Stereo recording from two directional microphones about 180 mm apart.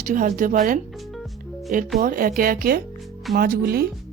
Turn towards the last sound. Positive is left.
turn(degrees=-55)  # may be behind; listen again after turning